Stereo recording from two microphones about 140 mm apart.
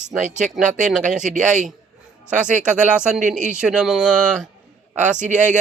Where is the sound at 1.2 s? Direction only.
60° right (ahead or behind).